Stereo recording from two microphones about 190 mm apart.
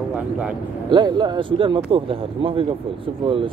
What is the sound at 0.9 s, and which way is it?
Speech, 25° right (ahead or behind).